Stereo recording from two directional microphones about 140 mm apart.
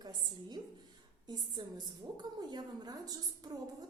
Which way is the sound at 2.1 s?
30° right (ahead or behind).